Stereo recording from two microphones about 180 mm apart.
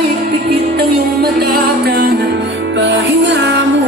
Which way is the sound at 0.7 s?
60° right (ahead or behind).